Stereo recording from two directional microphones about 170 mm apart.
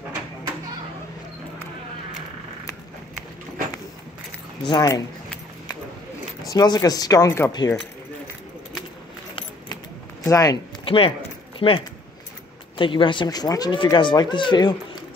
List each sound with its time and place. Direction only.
4.6 s speech: 20° left (ahead or behind)
6.5 s speech: 20° left (ahead or behind)
10.2 s speech: 20° left (ahead or behind)